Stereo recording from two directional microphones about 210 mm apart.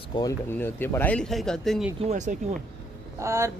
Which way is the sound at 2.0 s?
35° right (ahead or behind).